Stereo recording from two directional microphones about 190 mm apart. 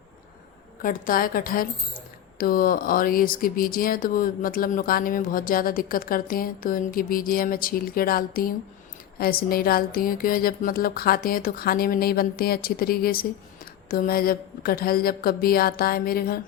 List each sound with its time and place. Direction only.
0.8 s speech: 45° left (ahead or behind)